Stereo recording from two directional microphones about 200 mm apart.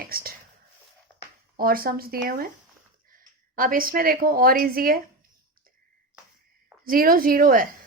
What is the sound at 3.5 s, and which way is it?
A woman's voice, 45° right (ahead or behind).